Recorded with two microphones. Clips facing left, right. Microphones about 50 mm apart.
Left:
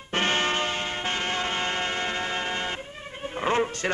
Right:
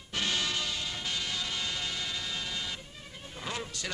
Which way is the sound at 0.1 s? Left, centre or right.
Left.